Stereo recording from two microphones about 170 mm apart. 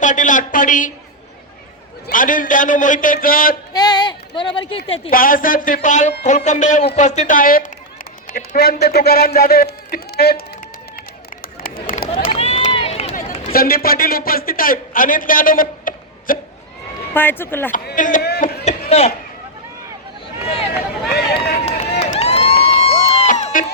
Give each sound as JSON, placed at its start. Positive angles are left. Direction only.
{"t": 0.0, "sound": "a man's voice", "side_deg": 50}
{"t": 2.0, "sound": "a man's voice", "side_deg": 50}
{"t": 3.7, "sound": "a sound", "side_deg": 25}
{"t": 5.1, "sound": "a man's voice", "side_deg": 55}
{"t": 11.9, "sound": "run", "side_deg": 35}
{"t": 13.5, "sound": "a man's voice", "side_deg": 60}
{"t": 17.2, "sound": "speech", "side_deg": 10}
{"t": 17.9, "sound": "speech", "side_deg": 50}
{"t": 18.2, "sound": "a sound", "side_deg": 70}
{"t": 18.9, "sound": "speech", "side_deg": 40}
{"t": 21.1, "sound": "run", "side_deg": 70}
{"t": 21.6, "sound": "crowd", "side_deg": 40}